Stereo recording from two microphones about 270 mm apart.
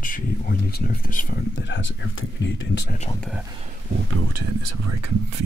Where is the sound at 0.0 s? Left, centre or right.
Left.